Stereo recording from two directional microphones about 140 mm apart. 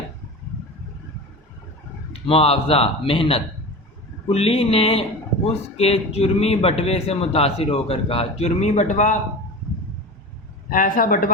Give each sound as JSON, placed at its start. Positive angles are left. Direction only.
{"t": 2.1, "sound": "speech", "side_deg": 45}
{"t": 10.7, "sound": "a man's voice", "side_deg": 80}